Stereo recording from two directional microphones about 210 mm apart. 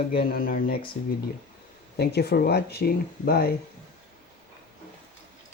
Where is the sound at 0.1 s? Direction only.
45° left (ahead or behind).